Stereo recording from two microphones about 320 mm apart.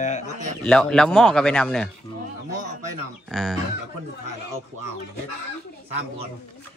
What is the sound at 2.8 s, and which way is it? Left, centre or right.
Speech, right.